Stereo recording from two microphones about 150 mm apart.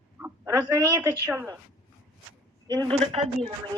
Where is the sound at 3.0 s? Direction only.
40° right (ahead or behind).